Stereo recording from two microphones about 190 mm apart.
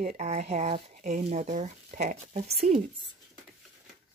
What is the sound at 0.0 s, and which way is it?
Speech, 40° right (ahead or behind).